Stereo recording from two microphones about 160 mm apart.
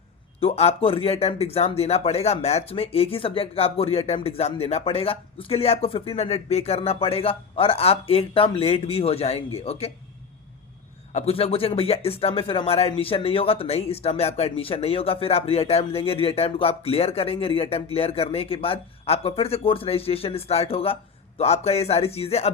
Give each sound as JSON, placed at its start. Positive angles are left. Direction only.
{"t": 0.3, "sound": "speech", "side_deg": 40}
{"t": 11.1, "sound": "speech", "side_deg": 40}